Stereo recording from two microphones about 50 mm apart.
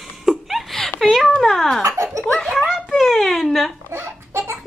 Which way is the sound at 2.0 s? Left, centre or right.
Right.